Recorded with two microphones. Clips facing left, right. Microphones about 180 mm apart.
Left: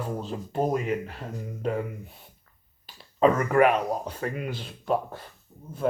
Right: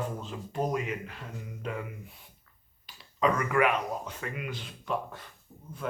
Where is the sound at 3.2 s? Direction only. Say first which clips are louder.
Left 6 dB; 40° left (ahead or behind).